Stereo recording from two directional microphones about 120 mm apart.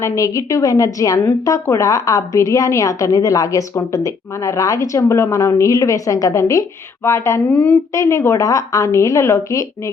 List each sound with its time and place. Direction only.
0.0 s a woman's voice: 25° left (ahead or behind)
7.5 s a woman's voice: 10° left (ahead or behind)
7.9 s a woman's voice: 25° left (ahead or behind)